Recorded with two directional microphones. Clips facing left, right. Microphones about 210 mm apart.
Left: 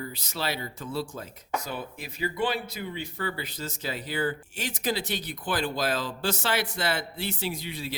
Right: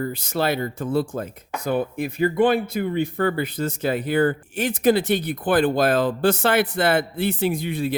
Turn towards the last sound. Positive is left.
turn(degrees=-55)  # may be behind; listen again after turning